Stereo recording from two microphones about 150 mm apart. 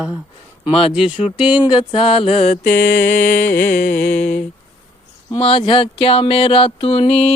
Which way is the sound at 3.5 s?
65° left (ahead or behind).